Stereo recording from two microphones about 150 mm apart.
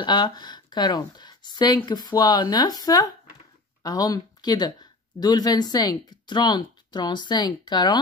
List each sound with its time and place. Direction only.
0.0 s speech: 30° left (ahead or behind)